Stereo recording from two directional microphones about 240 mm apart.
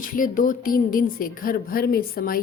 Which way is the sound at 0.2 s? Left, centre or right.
Left.